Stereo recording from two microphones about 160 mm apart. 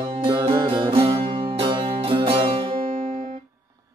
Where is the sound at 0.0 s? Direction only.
30° right (ahead or behind).